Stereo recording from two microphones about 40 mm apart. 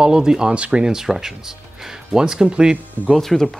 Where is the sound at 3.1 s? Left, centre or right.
Centre.